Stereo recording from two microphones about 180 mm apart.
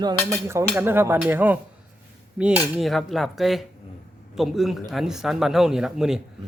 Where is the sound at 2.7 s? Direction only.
Centre (ahead or behind).